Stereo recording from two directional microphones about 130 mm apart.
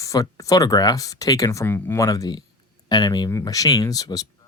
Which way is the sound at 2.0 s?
30° left (ahead or behind).